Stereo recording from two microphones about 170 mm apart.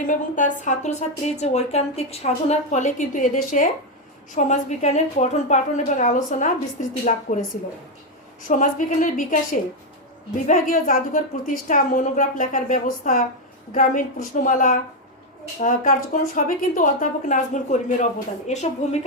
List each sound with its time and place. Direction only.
0.0 s a woman's voice: 50° left (ahead or behind)
8.4 s a woman's voice: 50° left (ahead or behind)